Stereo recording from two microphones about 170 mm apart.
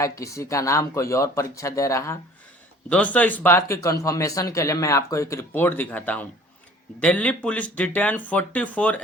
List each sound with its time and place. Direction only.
0.0 s speech: 20° left (ahead or behind)